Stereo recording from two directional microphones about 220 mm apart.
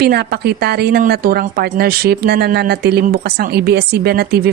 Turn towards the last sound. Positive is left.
turn(degrees=-45)  # may be behind; listen again after turning